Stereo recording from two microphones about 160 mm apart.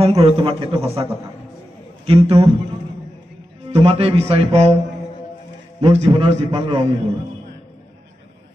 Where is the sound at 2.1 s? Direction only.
35° right (ahead or behind).